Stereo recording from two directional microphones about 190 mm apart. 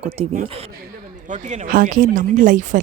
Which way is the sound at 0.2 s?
35° right (ahead or behind).